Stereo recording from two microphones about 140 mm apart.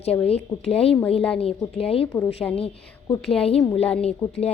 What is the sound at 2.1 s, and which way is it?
Speech, 10° left (ahead or behind).